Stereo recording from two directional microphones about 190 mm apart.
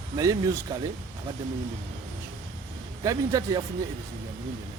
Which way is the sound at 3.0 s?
15° right (ahead or behind).